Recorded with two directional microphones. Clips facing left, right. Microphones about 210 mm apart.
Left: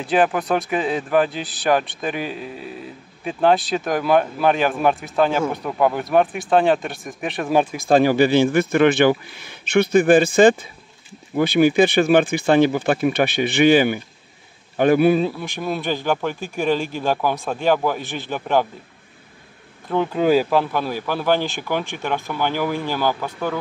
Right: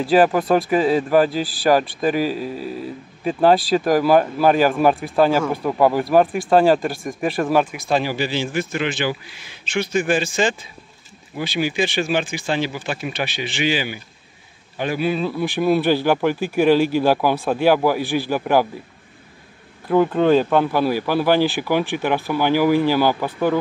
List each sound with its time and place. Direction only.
0.1 s speech: centre (ahead or behind)
7.7 s speech: 50° left (ahead or behind)
15.6 s speech: 10° right (ahead or behind)
19.9 s speech: centre (ahead or behind)
20.7 s speech: 10° right (ahead or behind)